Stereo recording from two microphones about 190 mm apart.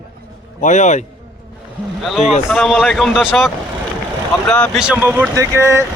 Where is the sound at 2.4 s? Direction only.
Centre (ahead or behind).